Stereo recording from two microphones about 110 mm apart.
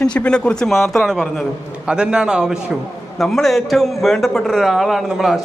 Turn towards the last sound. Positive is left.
turn(degrees=0)  # may be behind; listen again after turning